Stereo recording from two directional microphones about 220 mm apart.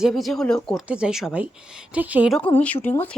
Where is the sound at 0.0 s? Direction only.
Centre (ahead or behind).